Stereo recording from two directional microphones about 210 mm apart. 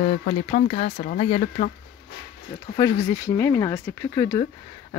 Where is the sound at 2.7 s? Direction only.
15° left (ahead or behind).